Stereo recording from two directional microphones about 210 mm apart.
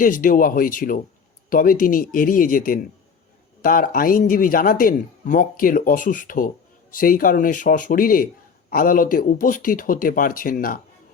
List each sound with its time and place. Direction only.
0.0 s speech: 40° left (ahead or behind)